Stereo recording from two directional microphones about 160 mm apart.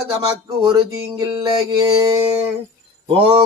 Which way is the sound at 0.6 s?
25° right (ahead or behind).